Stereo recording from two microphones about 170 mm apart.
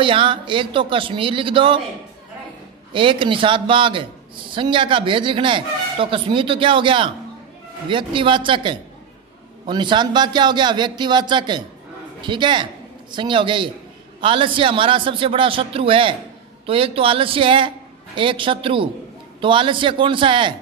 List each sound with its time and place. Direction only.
0.0 s a man's voice: 30° right (ahead or behind)
2.9 s a man's voice: 30° right (ahead or behind)